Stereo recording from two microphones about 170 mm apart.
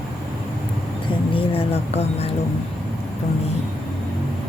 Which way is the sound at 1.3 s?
35° left (ahead or behind).